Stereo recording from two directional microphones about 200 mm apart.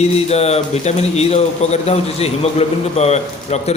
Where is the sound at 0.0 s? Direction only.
30° left (ahead or behind).